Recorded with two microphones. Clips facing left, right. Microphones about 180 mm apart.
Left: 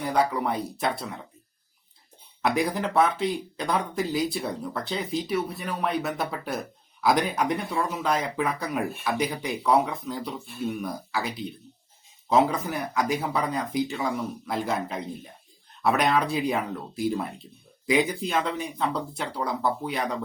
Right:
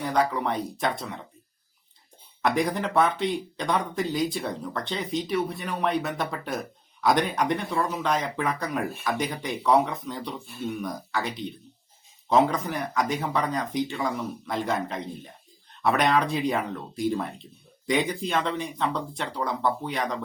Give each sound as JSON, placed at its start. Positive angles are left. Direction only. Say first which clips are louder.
{"t": 0.1, "sound": "speech", "louder": "left 1 dB", "side_deg": 10}
{"t": 2.4, "sound": "speech", "louder": "even", "side_deg": 5}